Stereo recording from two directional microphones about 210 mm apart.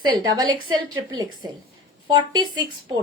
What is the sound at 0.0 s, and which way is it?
A woman's voice, 20° right (ahead or behind).